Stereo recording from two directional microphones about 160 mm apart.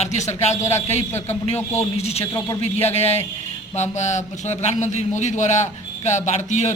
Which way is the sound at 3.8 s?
45° left (ahead or behind).